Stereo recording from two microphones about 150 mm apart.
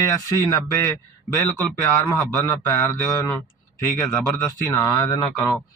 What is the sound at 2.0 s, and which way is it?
Speech, 20° left (ahead or behind).